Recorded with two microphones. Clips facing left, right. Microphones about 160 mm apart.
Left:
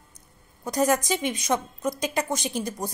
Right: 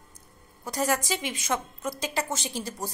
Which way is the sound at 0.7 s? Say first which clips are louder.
Left 4 dB; 20° left (ahead or behind).